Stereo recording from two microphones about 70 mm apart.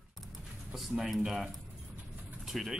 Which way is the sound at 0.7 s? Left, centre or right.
Centre.